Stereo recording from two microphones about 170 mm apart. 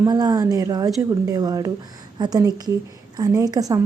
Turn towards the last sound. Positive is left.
turn(degrees=-20)  # may be behind; listen again after turning